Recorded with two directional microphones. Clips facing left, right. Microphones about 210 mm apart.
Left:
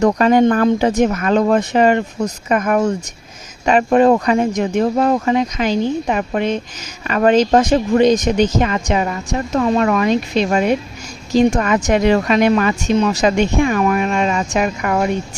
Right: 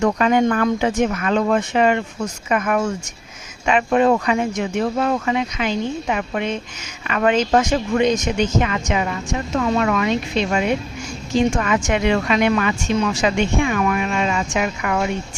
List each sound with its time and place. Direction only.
0.0 s speech: 40° left (ahead or behind)